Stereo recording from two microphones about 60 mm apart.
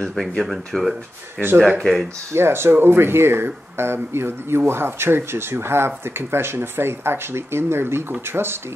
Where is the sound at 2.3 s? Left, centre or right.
Right.